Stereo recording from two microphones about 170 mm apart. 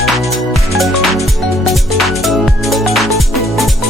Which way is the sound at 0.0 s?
Centre (ahead or behind).